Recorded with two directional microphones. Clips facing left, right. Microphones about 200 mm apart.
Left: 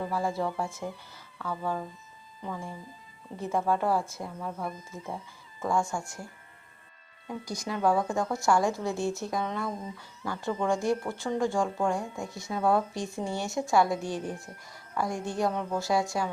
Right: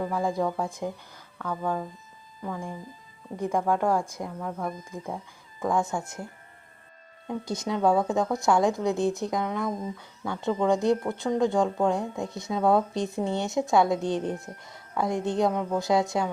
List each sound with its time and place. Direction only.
0.0 s speech: 15° right (ahead or behind)
3.3 s speech: 15° right (ahead or behind)
4.4 s speech: centre (ahead or behind)
5.0 s speech: 15° right (ahead or behind)
7.3 s a woman's voice: 25° right (ahead or behind)